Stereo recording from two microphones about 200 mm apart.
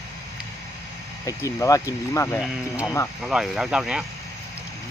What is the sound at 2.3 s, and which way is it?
Speech, 5° right (ahead or behind).